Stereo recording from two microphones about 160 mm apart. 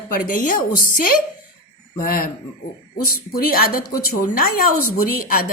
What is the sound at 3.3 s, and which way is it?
A woman's voice, 70° left (ahead or behind).